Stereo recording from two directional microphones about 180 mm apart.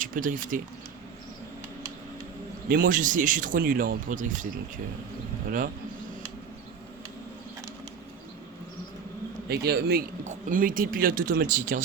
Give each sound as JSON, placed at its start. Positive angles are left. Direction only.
{"t": 0.0, "sound": "speech", "side_deg": -50}
{"t": 2.6, "sound": "speech", "side_deg": -50}
{"t": 5.5, "sound": "speech", "side_deg": -50}
{"t": 9.5, "sound": "speech", "side_deg": -60}
{"t": 10.2, "sound": "speech", "side_deg": -50}